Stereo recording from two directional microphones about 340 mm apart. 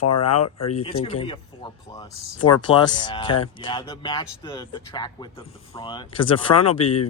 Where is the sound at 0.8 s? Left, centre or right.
Centre.